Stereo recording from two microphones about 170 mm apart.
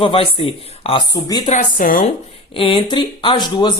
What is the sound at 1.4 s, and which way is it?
Speech, 45° left (ahead or behind).